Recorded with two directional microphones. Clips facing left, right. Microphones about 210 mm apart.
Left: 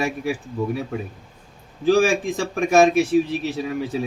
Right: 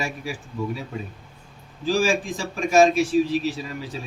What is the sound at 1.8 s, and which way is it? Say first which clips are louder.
A man's voice: left 5 dB; 60° left (ahead or behind).